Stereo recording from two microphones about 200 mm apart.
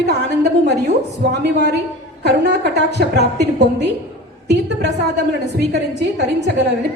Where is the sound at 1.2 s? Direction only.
60° right (ahead or behind).